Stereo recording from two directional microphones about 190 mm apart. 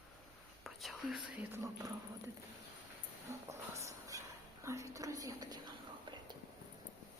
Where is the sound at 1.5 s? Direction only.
15° right (ahead or behind).